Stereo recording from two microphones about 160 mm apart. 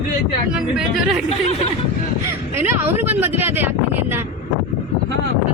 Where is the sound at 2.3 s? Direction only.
15° right (ahead or behind).